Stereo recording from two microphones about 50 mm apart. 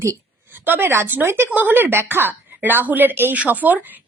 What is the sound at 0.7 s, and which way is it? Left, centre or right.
Speech, right.